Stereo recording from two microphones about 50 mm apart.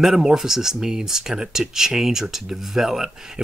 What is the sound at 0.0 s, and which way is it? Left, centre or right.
Speech, centre.